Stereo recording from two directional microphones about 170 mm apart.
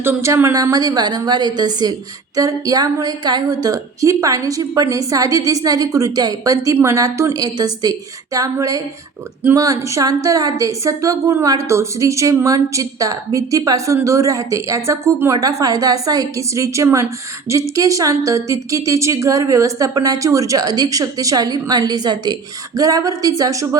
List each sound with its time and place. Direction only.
0.0 s a woman's voice: 15° right (ahead or behind)